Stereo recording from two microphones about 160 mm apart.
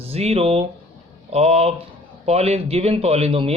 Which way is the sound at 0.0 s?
40° right (ahead or behind).